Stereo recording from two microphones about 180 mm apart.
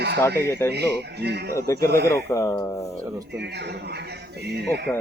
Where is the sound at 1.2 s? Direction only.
70° right (ahead or behind).